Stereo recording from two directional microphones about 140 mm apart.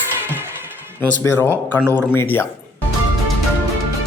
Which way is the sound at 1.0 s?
10° left (ahead or behind).